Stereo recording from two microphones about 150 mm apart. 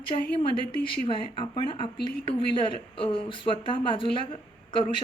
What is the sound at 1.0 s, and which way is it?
Speech, 35° left (ahead or behind).